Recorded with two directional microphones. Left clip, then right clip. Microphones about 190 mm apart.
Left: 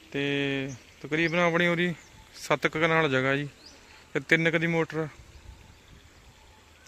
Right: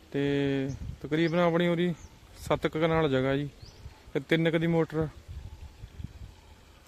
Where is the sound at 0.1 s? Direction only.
20° right (ahead or behind).